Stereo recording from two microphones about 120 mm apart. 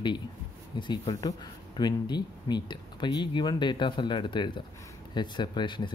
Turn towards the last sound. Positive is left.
turn(degrees=40)  # may be behind; listen again after turning